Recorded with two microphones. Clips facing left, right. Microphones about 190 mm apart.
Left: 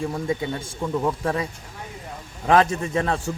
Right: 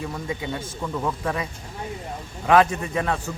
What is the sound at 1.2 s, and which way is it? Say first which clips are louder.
Speech: left 2 dB; 35° left (ahead or behind).